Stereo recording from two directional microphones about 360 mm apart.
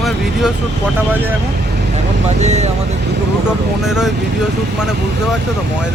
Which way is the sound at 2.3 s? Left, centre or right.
Centre.